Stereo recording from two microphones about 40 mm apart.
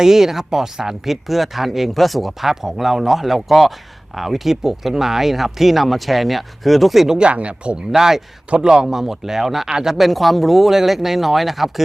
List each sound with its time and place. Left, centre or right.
0.0 s speech: centre
7.2 s speech: right
7.9 s speech: centre
8.4 s speech: right
10.1 s speech: centre